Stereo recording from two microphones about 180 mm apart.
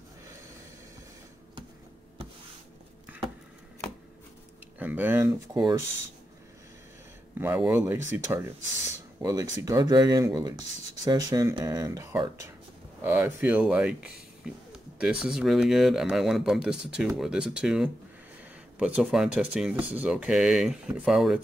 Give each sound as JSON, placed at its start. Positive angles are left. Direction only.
{"t": 3.1, "sound": "a sound", "side_deg": -10}
{"t": 4.7, "sound": "speech", "side_deg": -10}
{"t": 7.3, "sound": "speech", "side_deg": -10}